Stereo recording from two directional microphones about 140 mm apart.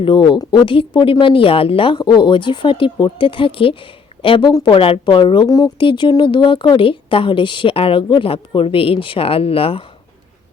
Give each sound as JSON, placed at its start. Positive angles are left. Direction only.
{"t": 0.0, "sound": "speech", "side_deg": 35}